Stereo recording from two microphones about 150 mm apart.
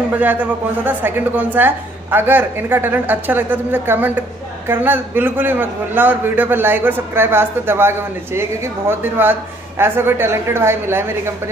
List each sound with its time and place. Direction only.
0.2 s a man's voice: 10° right (ahead or behind)